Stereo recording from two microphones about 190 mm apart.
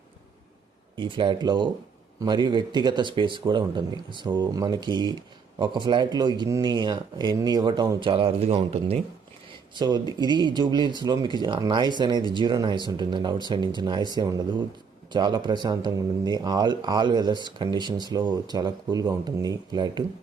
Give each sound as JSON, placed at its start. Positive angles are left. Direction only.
{"t": 0.9, "sound": "speech", "side_deg": -25}